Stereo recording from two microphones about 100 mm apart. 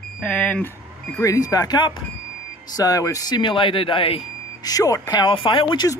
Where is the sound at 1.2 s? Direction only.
35° left (ahead or behind); by 4.2 s 60° left (ahead or behind).